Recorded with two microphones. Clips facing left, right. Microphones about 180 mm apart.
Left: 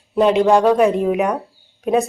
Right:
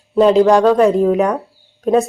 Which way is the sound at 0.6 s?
15° left (ahead or behind).